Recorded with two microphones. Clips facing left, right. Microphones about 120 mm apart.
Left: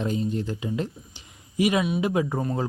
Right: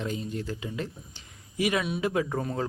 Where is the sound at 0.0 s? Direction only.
25° left (ahead or behind).